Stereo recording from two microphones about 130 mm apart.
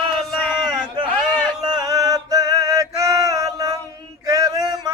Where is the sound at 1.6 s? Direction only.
30° right (ahead or behind).